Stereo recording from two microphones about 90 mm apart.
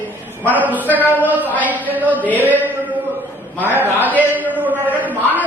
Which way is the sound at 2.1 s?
20° left (ahead or behind).